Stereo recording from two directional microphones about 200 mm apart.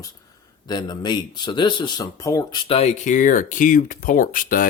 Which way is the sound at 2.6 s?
30° left (ahead or behind).